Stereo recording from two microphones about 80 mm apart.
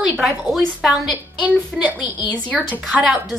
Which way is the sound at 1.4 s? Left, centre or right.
Centre.